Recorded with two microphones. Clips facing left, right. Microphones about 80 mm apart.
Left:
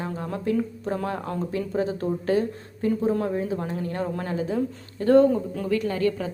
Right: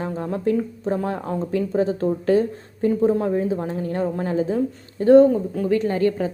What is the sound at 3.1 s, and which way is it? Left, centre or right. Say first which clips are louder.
A woman's voice: right 4 dB; right.